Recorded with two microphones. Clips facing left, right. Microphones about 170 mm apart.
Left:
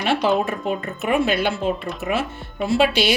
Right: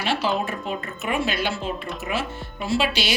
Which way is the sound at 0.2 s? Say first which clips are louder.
Left 5 dB; 55° left (ahead or behind).